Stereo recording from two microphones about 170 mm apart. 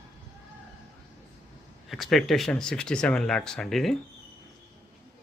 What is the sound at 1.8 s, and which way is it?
Speech, centre (ahead or behind).